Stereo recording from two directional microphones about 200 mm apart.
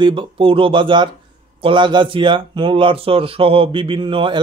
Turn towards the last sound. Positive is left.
turn(degrees=-25)  # may be behind; listen again after turning